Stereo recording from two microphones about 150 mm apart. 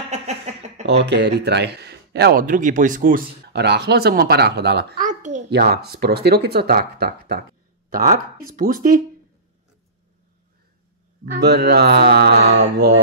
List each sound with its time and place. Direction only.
0.1 s a sound: 50° right (ahead or behind)
0.8 s speech: 90° right; by 5.4 s 55° right (ahead or behind)
5.5 s speech: 90° right
7.9 s speech: 70° right (ahead or behind)
11.3 s speech: 90° right